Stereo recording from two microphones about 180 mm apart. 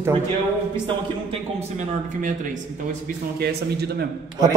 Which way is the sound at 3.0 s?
65° right (ahead or behind).